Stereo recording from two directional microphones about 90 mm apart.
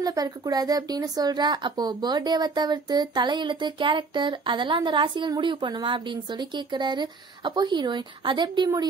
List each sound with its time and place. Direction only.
0.0 s a woman's voice: 45° right (ahead or behind)